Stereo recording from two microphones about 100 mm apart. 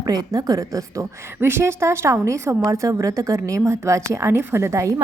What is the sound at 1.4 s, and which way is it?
A woman's voice, 25° right (ahead or behind).